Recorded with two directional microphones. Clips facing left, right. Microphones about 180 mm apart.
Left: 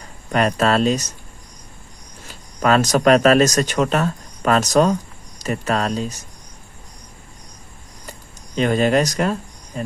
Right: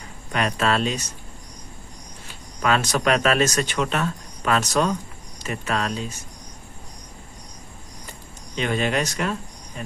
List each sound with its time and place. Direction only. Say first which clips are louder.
0.3 s speech: left 5 dB; 40° left (ahead or behind)
2.6 s speech: left 6 dB; 40° left (ahead or behind)
8.5 s speech: left 7 dB; 40° left (ahead or behind)